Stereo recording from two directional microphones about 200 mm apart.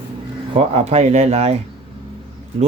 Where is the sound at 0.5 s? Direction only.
30° right (ahead or behind).